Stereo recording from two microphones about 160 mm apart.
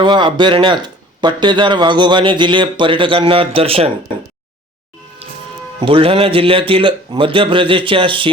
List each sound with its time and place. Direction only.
0.0 s speech: 30° right (ahead or behind)
5.2 s music: 40° right (ahead or behind)
5.8 s speech: 35° right (ahead or behind)